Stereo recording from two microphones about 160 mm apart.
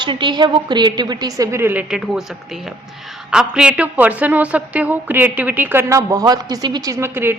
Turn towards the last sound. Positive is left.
turn(degrees=-15)  # may be behind; listen again after turning